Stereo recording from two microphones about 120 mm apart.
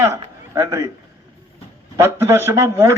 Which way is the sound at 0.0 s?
25° right (ahead or behind).